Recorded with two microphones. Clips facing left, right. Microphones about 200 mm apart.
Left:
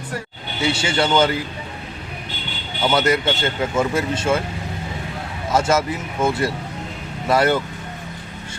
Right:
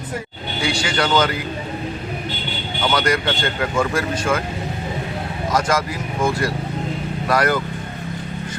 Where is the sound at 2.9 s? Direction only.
25° left (ahead or behind).